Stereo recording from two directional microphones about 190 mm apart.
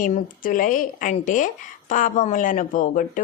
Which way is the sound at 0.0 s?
45° left (ahead or behind).